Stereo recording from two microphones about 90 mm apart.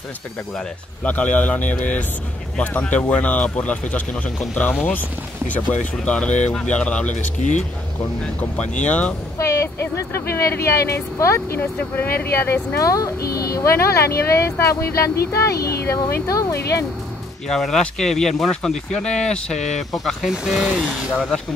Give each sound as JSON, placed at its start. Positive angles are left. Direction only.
{"t": 1.0, "sound": "speech", "side_deg": 15}
{"t": 5.5, "sound": "speech", "side_deg": 15}
{"t": 8.4, "sound": "speech", "side_deg": 15}
{"t": 9.4, "sound": "speech", "side_deg": 35}
{"t": 12.8, "sound": "speech", "side_deg": 40}
{"t": 17.5, "sound": "speech", "side_deg": 5}
{"t": 20.6, "sound": "speech", "side_deg": -15}